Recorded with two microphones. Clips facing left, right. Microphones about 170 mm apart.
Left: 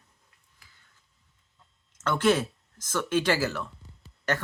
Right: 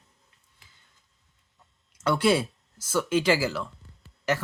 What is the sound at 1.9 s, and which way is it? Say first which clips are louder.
Speech: right 1 dB; 10° right (ahead or behind).